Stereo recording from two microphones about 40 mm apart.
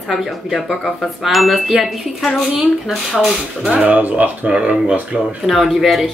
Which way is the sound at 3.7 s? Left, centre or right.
Right.